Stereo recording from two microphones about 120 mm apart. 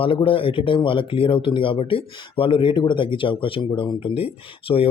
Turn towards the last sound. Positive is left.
turn(degrees=55)  # may be behind; listen again after turning